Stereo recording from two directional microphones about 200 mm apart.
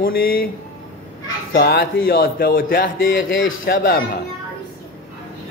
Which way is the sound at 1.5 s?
55° left (ahead or behind).